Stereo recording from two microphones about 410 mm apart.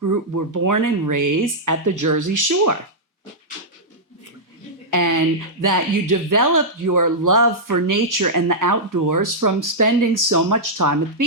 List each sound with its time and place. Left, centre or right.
0.0 s speech: right
4.9 s a sound: right
5.6 s speech: right